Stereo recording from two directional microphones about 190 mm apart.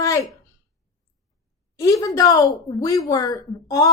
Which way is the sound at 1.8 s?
15° left (ahead or behind).